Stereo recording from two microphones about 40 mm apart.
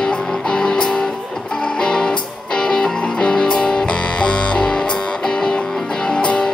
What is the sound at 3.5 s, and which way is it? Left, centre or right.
Music, centre.